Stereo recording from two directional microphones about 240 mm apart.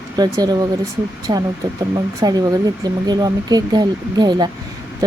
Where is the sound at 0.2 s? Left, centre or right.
Centre.